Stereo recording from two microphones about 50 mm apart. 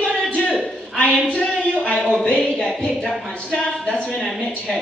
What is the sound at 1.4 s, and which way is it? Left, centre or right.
Speech, centre.